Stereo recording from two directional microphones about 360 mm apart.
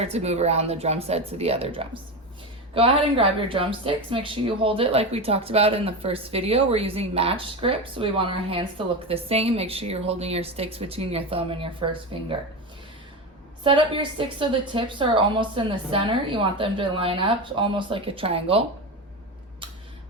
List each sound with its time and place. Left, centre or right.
0.0 s speech: centre
13.7 s speech: centre